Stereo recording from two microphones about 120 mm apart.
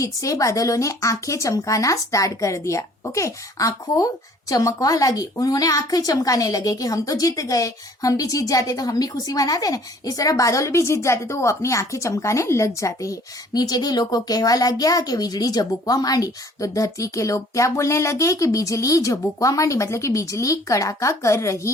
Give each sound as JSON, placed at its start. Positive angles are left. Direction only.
{"t": 0.0, "sound": "speech", "side_deg": 30}